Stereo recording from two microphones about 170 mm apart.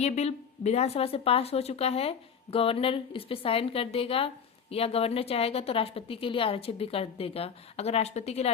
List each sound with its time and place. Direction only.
0.0 s speech: 40° left (ahead or behind)